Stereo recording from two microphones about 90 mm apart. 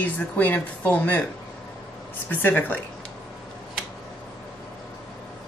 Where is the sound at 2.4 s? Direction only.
20° left (ahead or behind).